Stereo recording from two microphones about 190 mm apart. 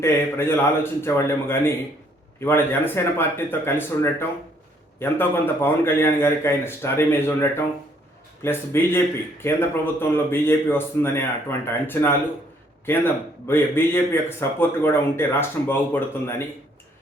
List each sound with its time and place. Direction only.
0.0 s a man's voice: 10° left (ahead or behind)
13.5 s a man's voice: 10° left (ahead or behind)